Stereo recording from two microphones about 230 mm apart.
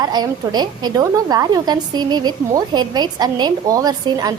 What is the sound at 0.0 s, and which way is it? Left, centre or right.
A woman's voice, centre.